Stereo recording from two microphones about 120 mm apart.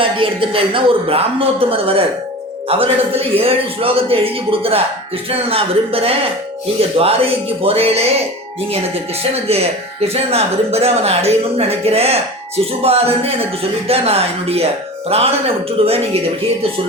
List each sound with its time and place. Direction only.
0.0 s a man's voice: 45° right (ahead or behind)
9.2 s speech: 55° right (ahead or behind)